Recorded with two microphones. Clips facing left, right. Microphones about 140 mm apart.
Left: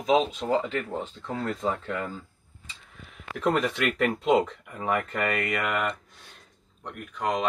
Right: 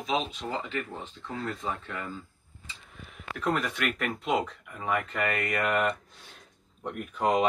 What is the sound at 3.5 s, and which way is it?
Speech, 30° left (ahead or behind).